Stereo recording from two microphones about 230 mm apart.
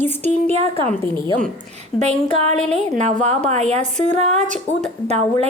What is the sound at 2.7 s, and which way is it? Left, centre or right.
A woman's voice, right.